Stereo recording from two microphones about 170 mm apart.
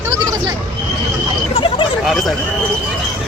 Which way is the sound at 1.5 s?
30° left (ahead or behind).